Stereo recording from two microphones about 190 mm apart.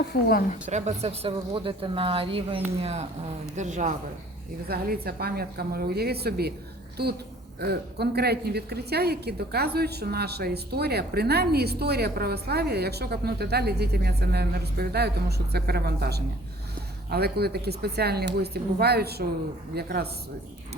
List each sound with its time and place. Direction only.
0.1 s a woman's voice: 50° left (ahead or behind)
0.7 s speech: 35° right (ahead or behind)
4.7 s a woman's voice: 55° right (ahead or behind)